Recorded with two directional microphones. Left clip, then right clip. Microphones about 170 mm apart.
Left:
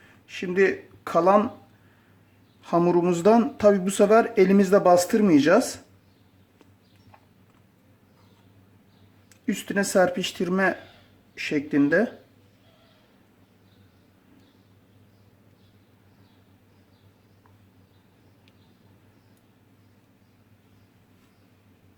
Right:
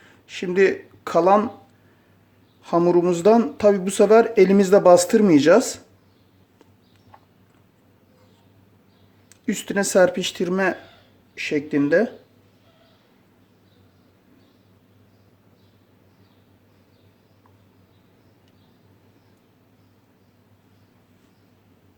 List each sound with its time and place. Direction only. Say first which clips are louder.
0.3 s speech: right 4 dB; 20° right (ahead or behind)
2.6 s speech: right 3 dB; 5° right (ahead or behind)
9.5 s speech: right 3 dB; 15° right (ahead or behind)